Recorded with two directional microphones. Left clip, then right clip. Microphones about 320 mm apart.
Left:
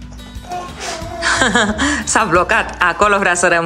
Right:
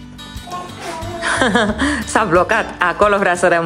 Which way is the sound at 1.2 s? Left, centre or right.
Centre.